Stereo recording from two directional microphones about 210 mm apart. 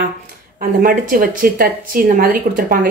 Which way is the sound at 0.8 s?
45° right (ahead or behind).